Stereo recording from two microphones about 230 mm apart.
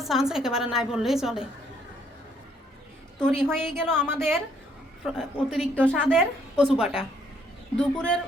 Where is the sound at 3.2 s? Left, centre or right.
Centre.